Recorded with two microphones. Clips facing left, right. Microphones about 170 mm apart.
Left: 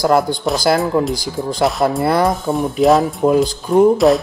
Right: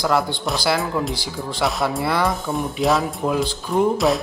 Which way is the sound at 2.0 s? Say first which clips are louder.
Left 6 dB; 45° left (ahead or behind).